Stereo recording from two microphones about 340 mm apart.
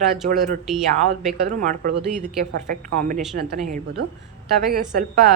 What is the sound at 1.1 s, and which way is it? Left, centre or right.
A woman's voice, right.